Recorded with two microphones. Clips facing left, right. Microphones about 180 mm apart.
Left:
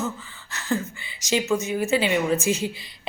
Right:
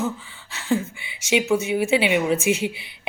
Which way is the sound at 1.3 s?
15° right (ahead or behind).